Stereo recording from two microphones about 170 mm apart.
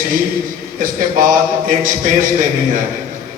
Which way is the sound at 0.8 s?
55° right (ahead or behind).